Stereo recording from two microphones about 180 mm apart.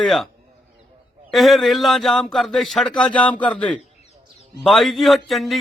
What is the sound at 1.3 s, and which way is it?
A man's voice, centre (ahead or behind).